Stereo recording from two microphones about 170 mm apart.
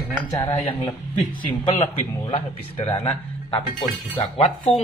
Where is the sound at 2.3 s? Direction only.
40° left (ahead or behind).